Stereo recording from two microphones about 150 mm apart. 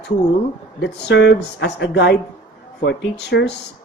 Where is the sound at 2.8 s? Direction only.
90° left.